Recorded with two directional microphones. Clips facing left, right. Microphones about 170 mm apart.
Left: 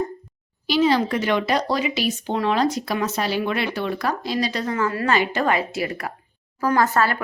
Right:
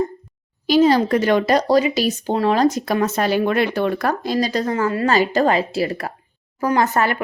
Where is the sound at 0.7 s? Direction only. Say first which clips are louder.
Right 5 dB; 45° right (ahead or behind).